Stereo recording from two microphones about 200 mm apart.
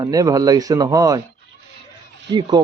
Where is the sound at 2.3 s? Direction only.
20° right (ahead or behind).